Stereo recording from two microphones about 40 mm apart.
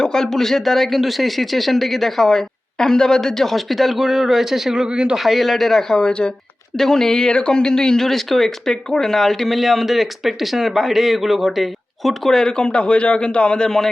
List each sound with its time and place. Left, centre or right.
0.0 s speech: centre; by 5.1 s right
5.1 s speech: centre
6.0 s a man's voice: left
6.7 s speech: centre
12.3 s a man's voice: centre
13.7 s a man's voice: centre